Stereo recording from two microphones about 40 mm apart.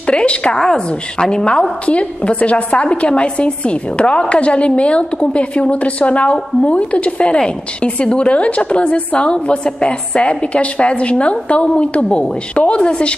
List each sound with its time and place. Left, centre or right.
0.0 s speech: left
0.6 s a woman's voice: centre